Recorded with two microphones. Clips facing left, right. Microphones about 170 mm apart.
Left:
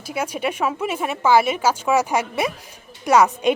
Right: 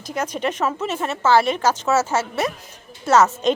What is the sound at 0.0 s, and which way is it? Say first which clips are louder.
A woman's voice: even; 10° left (ahead or behind).